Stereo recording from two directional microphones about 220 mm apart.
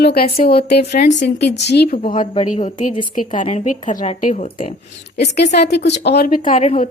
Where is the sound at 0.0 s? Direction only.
45° left (ahead or behind).